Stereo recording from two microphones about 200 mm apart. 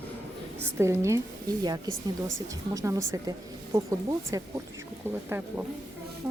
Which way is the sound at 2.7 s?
15° right (ahead or behind).